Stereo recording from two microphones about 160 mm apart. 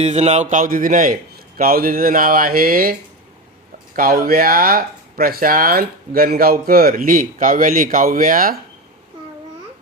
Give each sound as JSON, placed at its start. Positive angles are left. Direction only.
{"t": 0.0, "sound": "speech", "side_deg": -45}
{"t": 3.9, "sound": "speech", "side_deg": -65}